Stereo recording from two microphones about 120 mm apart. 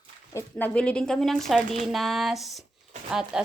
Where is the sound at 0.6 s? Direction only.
10° left (ahead or behind).